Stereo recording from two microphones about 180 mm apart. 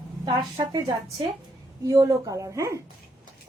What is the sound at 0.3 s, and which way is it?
A child's voice, 25° right (ahead or behind).